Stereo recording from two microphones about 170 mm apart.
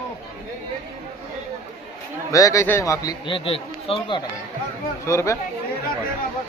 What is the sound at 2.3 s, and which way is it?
A man's voice, 20° left (ahead or behind).